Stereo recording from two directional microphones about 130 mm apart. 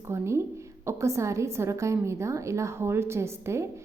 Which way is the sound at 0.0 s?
20° right (ahead or behind).